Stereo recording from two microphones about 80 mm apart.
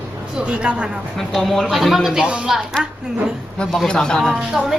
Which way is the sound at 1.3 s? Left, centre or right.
Centre.